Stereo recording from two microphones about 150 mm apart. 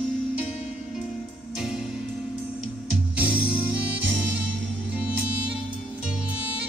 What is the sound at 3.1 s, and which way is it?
Music, 10° right (ahead or behind).